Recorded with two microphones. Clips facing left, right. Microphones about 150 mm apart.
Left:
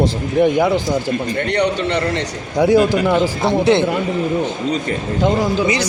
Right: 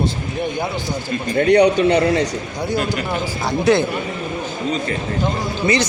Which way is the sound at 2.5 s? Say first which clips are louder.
Left 11 dB; 90° left.